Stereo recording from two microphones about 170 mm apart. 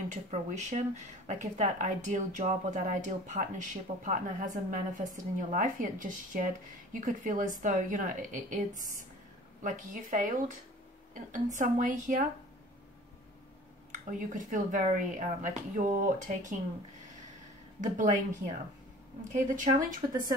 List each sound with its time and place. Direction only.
0.1 s speech: 45° right (ahead or behind)
13.9 s speech: 50° right (ahead or behind)
17.7 s speech: 45° right (ahead or behind)
19.5 s speech: 50° right (ahead or behind)